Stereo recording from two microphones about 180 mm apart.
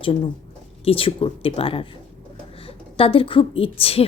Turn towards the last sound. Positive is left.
turn(degrees=30)  # may be behind; listen again after turning